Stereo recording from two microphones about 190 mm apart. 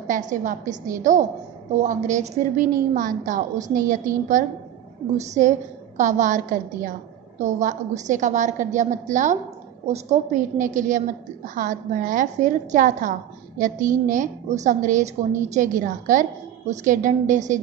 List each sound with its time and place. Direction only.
0.0 s a woman's voice: 40° right (ahead or behind)